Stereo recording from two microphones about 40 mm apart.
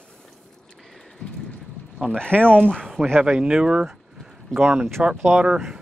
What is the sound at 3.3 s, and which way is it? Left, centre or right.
Speech, right.